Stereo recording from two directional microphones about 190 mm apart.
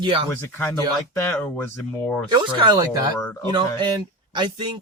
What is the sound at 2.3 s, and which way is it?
Speech, 20° right (ahead or behind).